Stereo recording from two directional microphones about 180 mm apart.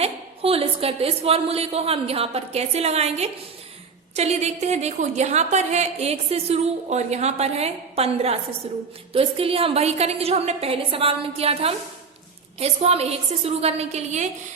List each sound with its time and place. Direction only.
0.0 s a woman's voice: 35° right (ahead or behind)